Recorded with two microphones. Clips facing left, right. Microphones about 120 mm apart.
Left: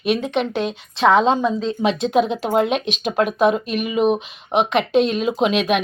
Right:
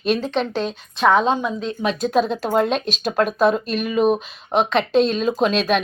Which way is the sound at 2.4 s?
10° left (ahead or behind).